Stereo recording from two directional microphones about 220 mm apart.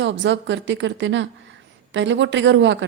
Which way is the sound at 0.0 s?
55° right (ahead or behind).